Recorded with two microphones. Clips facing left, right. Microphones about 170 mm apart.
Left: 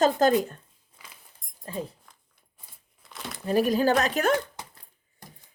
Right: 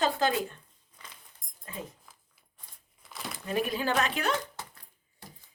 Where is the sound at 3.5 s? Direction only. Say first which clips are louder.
Left 8 dB; 40° left (ahead or behind).